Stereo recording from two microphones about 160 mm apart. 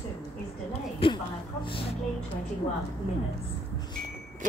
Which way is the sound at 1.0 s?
35° left (ahead or behind).